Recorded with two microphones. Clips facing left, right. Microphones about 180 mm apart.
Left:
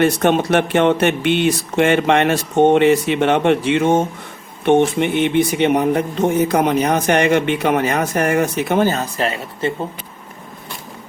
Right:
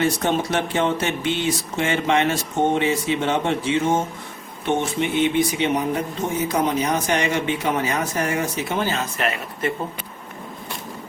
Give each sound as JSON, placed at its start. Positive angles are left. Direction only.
{"t": 0.0, "sound": "a man's voice", "side_deg": 65}